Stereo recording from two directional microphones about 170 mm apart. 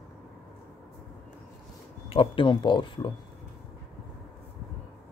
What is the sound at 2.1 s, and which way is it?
Speech, 30° left (ahead or behind).